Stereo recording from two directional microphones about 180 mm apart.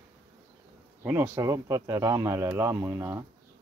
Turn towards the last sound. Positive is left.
turn(degrees=-15)  # may be behind; listen again after turning